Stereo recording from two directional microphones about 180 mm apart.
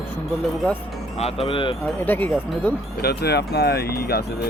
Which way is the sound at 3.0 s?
60° left (ahead or behind).